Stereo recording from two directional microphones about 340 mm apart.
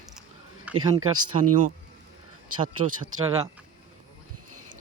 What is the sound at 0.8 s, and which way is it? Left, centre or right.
Speech, centre.